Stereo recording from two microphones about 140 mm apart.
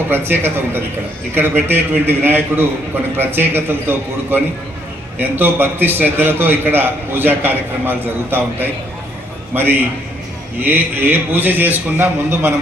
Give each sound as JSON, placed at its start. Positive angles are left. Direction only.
{"t": 0.1, "sound": "a man's voice", "side_deg": -15}